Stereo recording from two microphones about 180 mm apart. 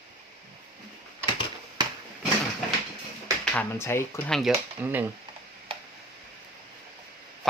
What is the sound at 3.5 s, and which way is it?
Speech, 15° left (ahead or behind).